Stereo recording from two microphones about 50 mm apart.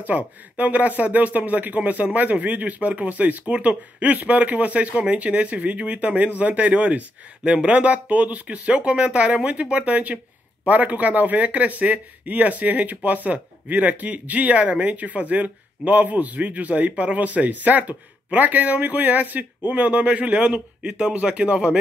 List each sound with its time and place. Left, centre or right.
0.6 s speech: right